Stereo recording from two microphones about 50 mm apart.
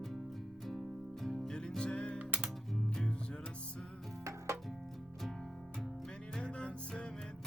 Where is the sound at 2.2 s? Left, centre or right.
Right.